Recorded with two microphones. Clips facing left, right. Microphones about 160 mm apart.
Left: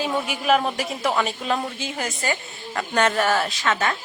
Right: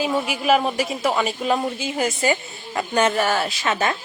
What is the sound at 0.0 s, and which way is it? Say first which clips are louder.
Speech: right 3 dB; 5° right (ahead or behind).